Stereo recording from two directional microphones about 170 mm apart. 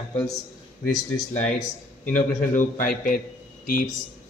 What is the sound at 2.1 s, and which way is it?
A man's voice, 50° left (ahead or behind).